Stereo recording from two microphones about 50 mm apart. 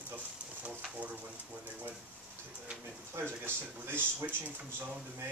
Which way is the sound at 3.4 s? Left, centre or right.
Right.